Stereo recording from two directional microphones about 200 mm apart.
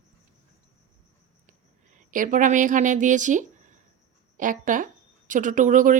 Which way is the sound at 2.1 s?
40° right (ahead or behind).